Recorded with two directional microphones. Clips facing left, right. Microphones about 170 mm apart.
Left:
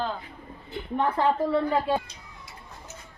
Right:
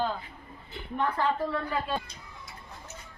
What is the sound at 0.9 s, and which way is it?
A woman's voice, 25° left (ahead or behind).